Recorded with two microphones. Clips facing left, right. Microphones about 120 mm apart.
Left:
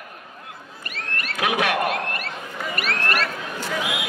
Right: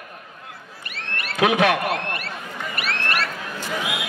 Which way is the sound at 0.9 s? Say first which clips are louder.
Left 1 dB; 40° left (ahead or behind).